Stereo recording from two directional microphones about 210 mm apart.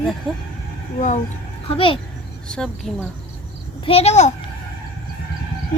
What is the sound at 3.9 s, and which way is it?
Speech, 30° left (ahead or behind).